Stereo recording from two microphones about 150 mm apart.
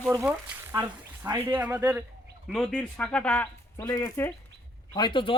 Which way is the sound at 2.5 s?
5° left (ahead or behind).